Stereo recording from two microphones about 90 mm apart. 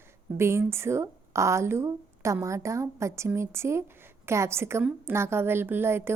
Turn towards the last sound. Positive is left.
turn(degrees=-25)  # may be behind; listen again after turning